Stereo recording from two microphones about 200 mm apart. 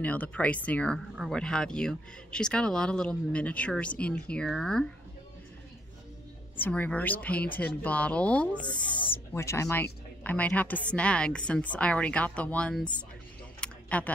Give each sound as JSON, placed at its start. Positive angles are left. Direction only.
{"t": 0.0, "sound": "speech", "side_deg": 5}
{"t": 6.6, "sound": "a woman's voice", "side_deg": 10}
{"t": 8.6, "sound": "a woman's voice", "side_deg": 25}
{"t": 13.6, "sound": "a sound", "side_deg": 5}